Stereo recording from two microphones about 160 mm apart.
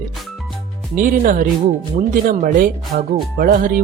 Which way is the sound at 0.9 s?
60° right (ahead or behind).